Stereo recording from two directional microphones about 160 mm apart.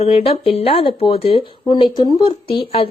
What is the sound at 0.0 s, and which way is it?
Speech, 40° left (ahead or behind).